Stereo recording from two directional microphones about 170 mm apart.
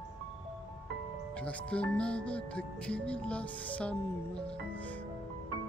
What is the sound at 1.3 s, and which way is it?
Speech, 5° left (ahead or behind).